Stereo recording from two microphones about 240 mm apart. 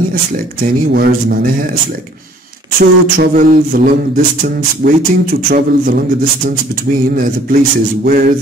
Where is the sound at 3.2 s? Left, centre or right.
Right.